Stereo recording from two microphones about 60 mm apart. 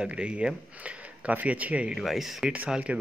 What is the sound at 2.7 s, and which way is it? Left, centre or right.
Speech, right.